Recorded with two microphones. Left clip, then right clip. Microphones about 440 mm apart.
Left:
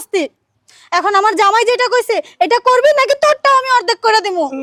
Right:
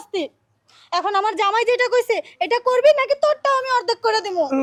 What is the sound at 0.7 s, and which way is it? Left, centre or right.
A woman's voice, left.